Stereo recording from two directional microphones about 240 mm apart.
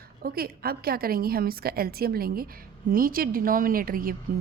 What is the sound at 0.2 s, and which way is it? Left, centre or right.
Speech, right.